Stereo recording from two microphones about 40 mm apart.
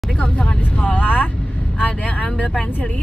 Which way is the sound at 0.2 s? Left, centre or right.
Left.